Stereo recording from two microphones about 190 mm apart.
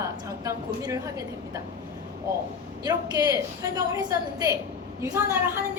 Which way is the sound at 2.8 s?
20° right (ahead or behind).